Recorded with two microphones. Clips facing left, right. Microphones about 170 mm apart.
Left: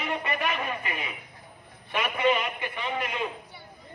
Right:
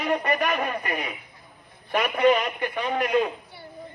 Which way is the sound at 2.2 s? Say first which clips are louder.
Right 5 dB; 40° right (ahead or behind).